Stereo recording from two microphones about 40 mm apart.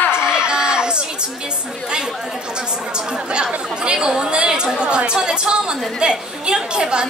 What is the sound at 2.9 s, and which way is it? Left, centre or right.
A woman's voice, right.